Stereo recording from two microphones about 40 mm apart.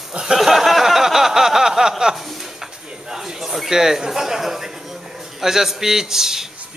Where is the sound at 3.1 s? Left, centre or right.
Centre.